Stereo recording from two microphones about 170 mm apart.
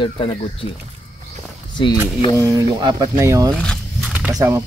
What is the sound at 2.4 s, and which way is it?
Speech, 20° right (ahead or behind).